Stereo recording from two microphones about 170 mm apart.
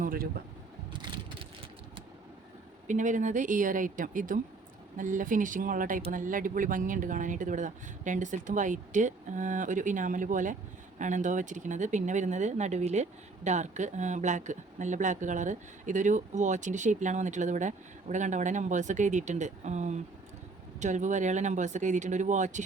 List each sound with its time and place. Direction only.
0.0 s speech: 60° right (ahead or behind)
2.8 s speech: 45° right (ahead or behind)